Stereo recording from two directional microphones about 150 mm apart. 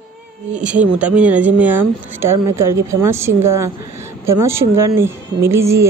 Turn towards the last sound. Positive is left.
turn(degrees=-20)  # may be behind; listen again after turning